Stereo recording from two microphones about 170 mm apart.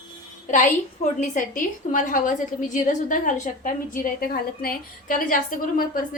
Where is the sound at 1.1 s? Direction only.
45° left (ahead or behind).